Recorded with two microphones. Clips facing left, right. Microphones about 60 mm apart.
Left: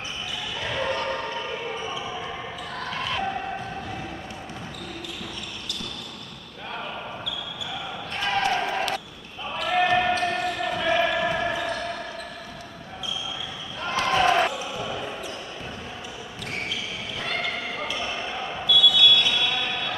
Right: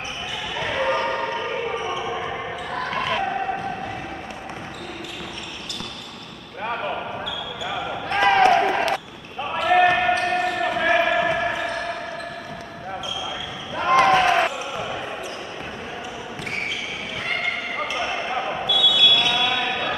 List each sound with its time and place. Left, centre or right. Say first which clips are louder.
0.6 s basketball bounce: right 5 dB; right
2.9 s a sound: right 4 dB; right
6.6 s basketball bounce: right 7 dB; right
8.5 s a sound: right 6 dB; right
9.5 s basketball bounce: right 5 dB; right
11.1 s basketball bounce: right 4 dB; right
14.1 s basketball bounce: right 3 dB; right
17.2 s a sound: right 3 dB; right
17.8 s basketball bounce: right 4 dB; right